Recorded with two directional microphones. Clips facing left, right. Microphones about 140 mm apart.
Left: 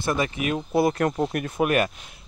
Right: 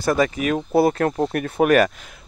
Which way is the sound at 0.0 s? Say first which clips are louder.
Right 5 dB; 35° right (ahead or behind).